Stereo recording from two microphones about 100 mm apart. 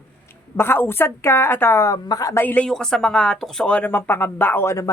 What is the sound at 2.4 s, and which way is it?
Speech, 20° left (ahead or behind).